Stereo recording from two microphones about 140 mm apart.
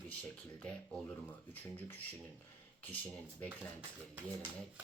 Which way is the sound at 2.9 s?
10° left (ahead or behind).